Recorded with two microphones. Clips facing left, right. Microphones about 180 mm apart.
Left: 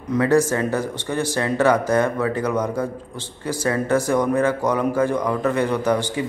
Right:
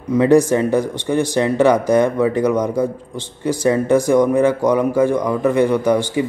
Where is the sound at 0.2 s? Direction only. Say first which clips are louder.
Right 5 dB; 15° right (ahead or behind).